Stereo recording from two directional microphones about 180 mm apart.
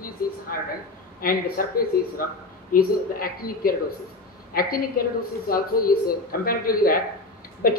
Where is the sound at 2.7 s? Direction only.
55° left (ahead or behind).